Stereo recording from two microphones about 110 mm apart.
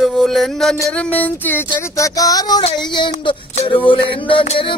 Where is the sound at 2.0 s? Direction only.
30° left (ahead or behind).